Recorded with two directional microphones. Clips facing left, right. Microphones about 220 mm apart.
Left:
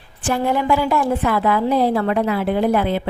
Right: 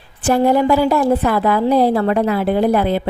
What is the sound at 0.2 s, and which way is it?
A woman's voice, 40° right (ahead or behind).